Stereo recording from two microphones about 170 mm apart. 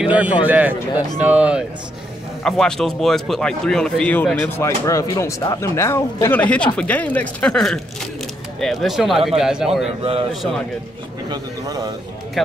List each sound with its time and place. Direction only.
0.0 s a man's voice: 10° right (ahead or behind)
0.9 s speech: 20° left (ahead or behind)
1.2 s a man's voice: 10° right (ahead or behind)
2.4 s a man's voice: centre (ahead or behind)
11.2 s speech: 20° right (ahead or behind)